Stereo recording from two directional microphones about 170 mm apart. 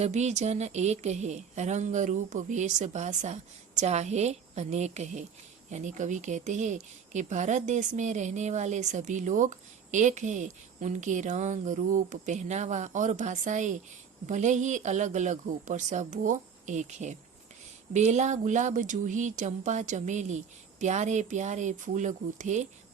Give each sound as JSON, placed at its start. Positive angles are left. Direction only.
{"t": 0.0, "sound": "speech", "side_deg": -40}